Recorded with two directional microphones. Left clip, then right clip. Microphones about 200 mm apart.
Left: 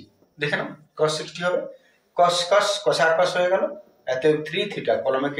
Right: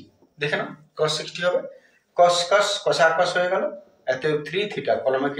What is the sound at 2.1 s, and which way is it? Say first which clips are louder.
Speech: right 1 dB; 15° right (ahead or behind).